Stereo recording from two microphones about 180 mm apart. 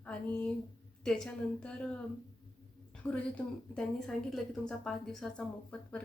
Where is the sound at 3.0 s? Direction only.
10° left (ahead or behind).